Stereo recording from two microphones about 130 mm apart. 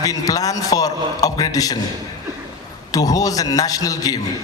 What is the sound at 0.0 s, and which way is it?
A man's voice, 30° left (ahead or behind).